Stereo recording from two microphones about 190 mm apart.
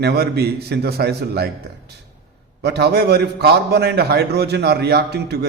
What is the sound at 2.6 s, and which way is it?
A man's voice, 60° right (ahead or behind).